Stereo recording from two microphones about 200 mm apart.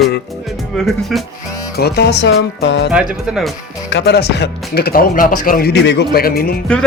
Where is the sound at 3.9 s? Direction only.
55° left (ahead or behind).